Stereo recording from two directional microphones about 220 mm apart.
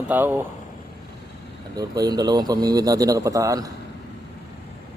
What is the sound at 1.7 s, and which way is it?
Speech, 15° right (ahead or behind).